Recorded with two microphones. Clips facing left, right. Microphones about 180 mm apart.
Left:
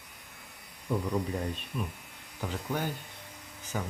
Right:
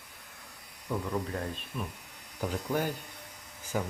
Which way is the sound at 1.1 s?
Centre (ahead or behind).